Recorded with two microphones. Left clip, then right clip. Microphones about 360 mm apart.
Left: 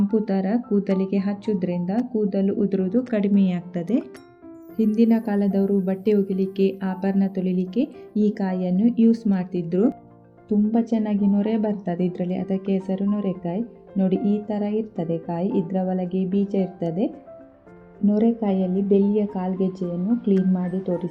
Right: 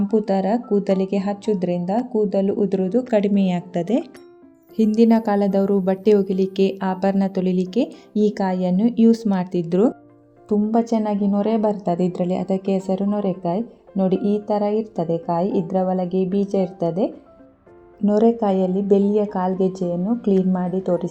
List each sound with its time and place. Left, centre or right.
0.1 s a woman's voice: right